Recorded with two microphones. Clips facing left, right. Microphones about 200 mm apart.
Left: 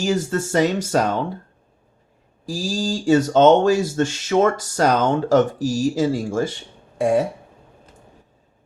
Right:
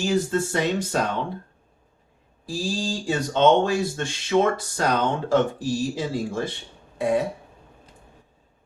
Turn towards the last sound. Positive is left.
turn(degrees=45)  # may be behind; listen again after turning